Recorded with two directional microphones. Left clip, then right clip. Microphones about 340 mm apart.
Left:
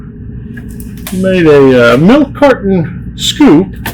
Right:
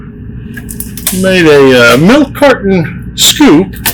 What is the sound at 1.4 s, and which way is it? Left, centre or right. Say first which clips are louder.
Speech: right 1 dB; left.